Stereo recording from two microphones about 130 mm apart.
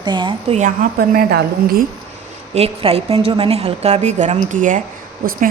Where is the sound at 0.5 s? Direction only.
85° right.